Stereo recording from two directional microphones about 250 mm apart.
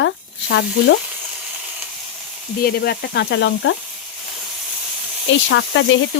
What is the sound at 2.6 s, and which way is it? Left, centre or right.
Frying, left.